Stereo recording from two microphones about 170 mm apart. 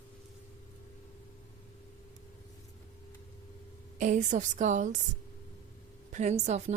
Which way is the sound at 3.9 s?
45° right (ahead or behind).